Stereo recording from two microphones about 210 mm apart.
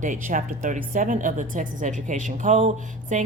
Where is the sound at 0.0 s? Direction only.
35° right (ahead or behind).